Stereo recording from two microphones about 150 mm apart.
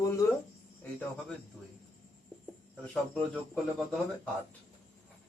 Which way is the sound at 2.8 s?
5° left (ahead or behind).